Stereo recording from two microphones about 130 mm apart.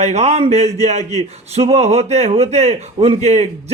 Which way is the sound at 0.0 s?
60° right (ahead or behind).